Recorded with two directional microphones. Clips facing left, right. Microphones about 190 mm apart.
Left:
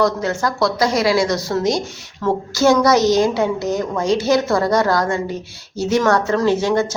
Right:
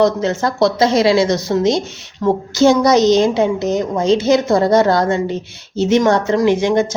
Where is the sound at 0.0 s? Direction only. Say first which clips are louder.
Right 3 dB; 20° right (ahead or behind).